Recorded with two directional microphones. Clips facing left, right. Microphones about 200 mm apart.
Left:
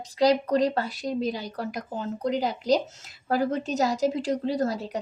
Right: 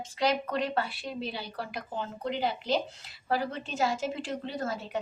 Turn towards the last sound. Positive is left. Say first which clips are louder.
# left 6 dB
turn(degrees=35)  # may be behind; listen again after turning